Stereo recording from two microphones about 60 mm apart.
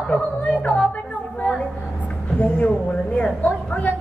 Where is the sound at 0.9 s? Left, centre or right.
Left.